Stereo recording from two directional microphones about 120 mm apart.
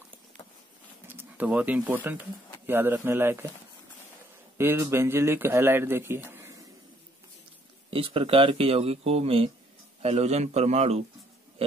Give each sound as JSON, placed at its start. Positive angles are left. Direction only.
{"t": 1.0, "sound": "speech", "side_deg": -15}
{"t": 4.6, "sound": "speech", "side_deg": -20}
{"t": 7.9, "sound": "a man's voice", "side_deg": -50}